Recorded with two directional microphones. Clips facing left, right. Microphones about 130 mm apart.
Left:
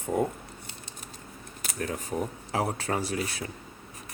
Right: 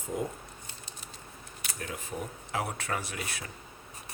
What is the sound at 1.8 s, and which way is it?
Speech, 40° left (ahead or behind).